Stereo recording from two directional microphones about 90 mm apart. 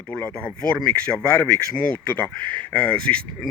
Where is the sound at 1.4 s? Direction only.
25° left (ahead or behind).